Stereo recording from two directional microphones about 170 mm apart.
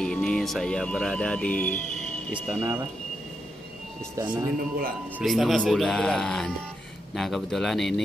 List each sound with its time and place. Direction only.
0.0 s speech: 5° left (ahead or behind)
2.3 s speech: 5° right (ahead or behind)
4.2 s a man's voice: 25° right (ahead or behind)
5.2 s speech: centre (ahead or behind)